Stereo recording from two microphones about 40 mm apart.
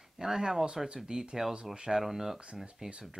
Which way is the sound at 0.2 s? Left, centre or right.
Right.